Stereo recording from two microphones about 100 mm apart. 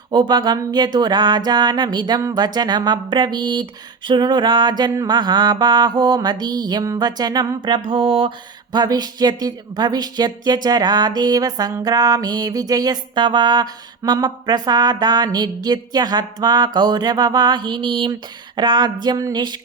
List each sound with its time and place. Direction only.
0.1 s music: 50° right (ahead or behind)
8.7 s music: 45° right (ahead or behind)